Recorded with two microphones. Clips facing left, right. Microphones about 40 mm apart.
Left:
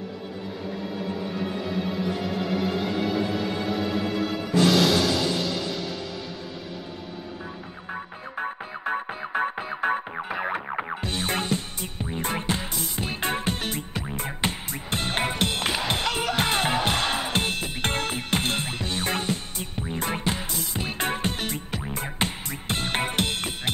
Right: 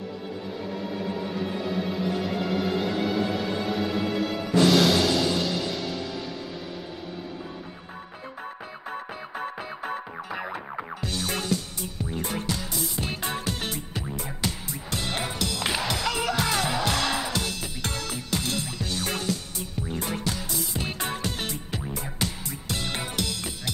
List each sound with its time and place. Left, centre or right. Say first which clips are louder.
1.8 s music: even; centre
7.9 s music: left 9 dB; left